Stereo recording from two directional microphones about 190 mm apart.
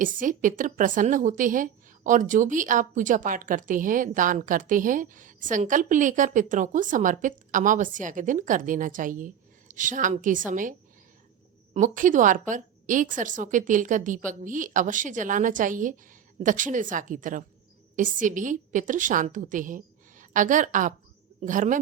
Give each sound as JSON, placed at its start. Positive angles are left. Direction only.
{"t": 0.0, "sound": "a woman's voice", "side_deg": -45}